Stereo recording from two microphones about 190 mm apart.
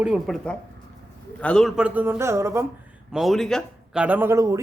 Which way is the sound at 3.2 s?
Centre (ahead or behind).